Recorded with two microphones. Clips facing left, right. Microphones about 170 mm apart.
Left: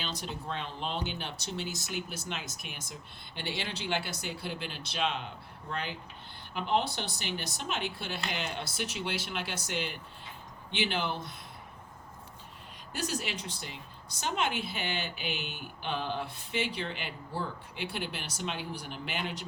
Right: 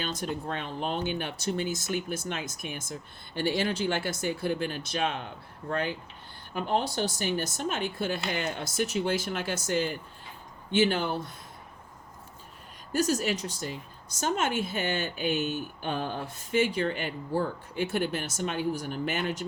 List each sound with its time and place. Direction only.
0.0 s speech: 50° right (ahead or behind)
12.9 s speech: 45° right (ahead or behind)